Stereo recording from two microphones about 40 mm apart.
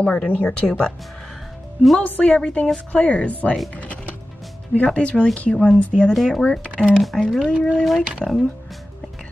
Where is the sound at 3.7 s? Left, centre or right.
Left.